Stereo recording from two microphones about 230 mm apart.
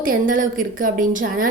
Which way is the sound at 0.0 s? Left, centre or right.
Right.